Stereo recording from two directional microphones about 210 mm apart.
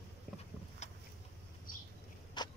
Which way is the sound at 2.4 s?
20° left (ahead or behind).